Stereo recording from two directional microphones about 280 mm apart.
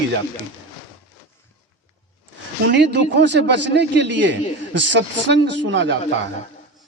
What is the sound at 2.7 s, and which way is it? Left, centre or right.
Speech, right.